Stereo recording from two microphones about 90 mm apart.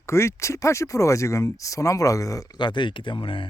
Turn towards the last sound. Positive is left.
turn(degrees=70)  # may be behind; listen again after turning